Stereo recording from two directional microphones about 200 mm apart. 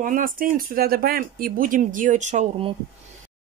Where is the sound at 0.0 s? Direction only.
45° right (ahead or behind).